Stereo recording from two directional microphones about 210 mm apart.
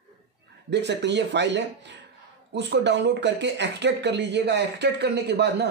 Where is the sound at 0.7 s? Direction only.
55° right (ahead or behind).